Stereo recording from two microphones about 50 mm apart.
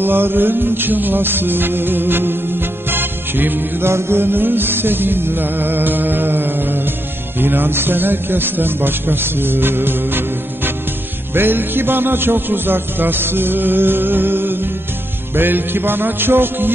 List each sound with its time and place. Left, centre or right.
0.0 s music: right
3.9 s speech: right